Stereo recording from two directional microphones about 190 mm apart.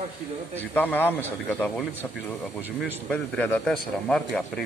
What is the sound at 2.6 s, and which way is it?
Speech, 10° right (ahead or behind).